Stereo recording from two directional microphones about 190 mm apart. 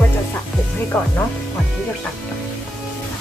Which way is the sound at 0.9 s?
10° left (ahead or behind).